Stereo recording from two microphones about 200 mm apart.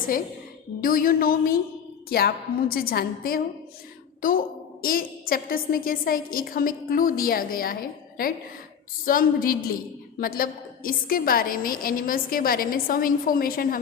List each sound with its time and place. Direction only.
0.8 s a woman's voice: 45° left (ahead or behind)
9.0 s a woman's voice: 45° left (ahead or behind)